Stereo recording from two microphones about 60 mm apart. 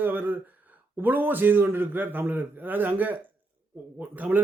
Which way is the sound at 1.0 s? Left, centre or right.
Right.